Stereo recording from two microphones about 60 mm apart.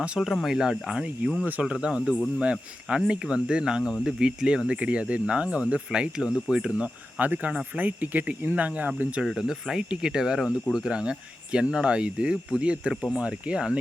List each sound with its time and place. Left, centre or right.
0.2 s speech: centre
0.4 s speech: centre
7.2 s speech: right
9.4 s speech: centre